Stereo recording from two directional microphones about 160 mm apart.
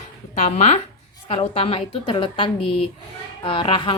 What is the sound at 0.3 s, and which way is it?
A woman's voice, 45° left (ahead or behind).